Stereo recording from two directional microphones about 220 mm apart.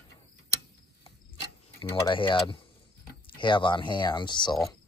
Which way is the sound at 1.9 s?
20° left (ahead or behind).